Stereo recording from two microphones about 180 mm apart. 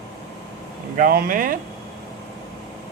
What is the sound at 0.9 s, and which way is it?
Speech, 55° right (ahead or behind).